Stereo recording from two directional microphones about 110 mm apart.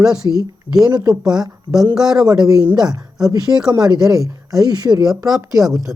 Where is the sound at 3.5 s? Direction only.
35° right (ahead or behind).